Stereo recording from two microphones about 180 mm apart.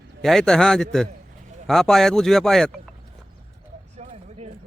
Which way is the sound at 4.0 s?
40° right (ahead or behind).